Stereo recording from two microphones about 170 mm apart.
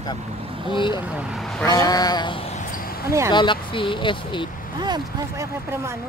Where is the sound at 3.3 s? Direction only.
30° left (ahead or behind).